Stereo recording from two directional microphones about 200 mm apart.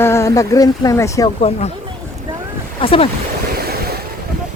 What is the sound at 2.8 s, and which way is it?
Speech, 25° left (ahead or behind).